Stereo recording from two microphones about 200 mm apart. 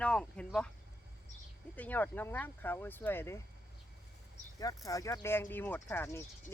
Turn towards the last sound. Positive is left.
turn(degrees=10)  # may be behind; listen again after turning